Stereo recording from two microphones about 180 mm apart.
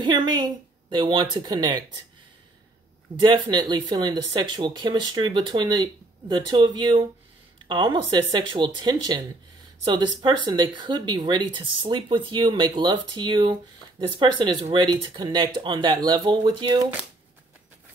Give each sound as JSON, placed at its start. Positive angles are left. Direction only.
{"t": 0.0, "sound": "speech", "side_deg": -25}
{"t": 3.2, "sound": "speech", "side_deg": -25}